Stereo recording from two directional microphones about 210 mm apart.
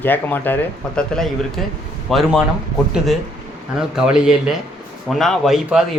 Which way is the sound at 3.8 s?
5° right (ahead or behind).